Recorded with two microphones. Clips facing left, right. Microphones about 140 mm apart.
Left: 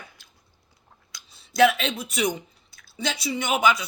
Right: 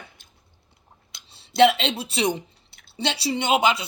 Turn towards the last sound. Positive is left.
turn(degrees=-25)  # may be behind; listen again after turning